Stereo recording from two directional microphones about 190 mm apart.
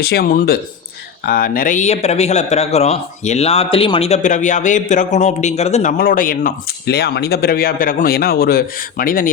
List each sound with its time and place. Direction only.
0.0 s speech: 55° left (ahead or behind)